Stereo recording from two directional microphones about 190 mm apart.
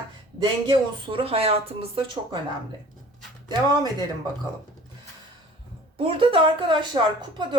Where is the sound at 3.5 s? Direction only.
20° right (ahead or behind).